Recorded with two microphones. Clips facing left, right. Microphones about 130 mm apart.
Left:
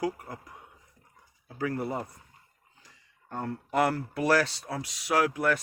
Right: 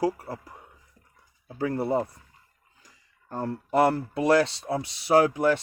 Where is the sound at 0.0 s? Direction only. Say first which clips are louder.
Right 5 dB; 30° right (ahead or behind).